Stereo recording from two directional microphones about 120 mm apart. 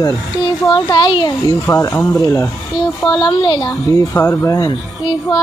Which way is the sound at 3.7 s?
25° left (ahead or behind).